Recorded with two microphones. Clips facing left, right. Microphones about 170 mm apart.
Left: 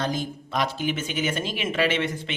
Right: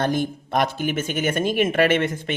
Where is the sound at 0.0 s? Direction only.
55° right (ahead or behind).